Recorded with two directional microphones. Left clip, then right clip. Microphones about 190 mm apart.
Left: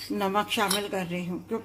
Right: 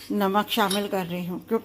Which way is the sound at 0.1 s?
30° right (ahead or behind).